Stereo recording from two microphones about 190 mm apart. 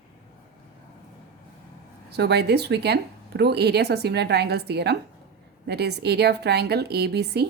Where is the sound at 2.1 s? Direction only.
60° right (ahead or behind).